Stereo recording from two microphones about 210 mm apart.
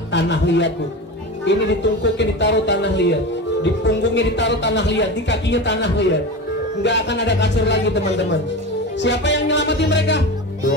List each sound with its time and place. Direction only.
0.1 s a man's voice: 55° left (ahead or behind)